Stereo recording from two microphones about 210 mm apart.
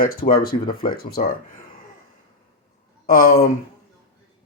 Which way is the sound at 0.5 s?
30° left (ahead or behind).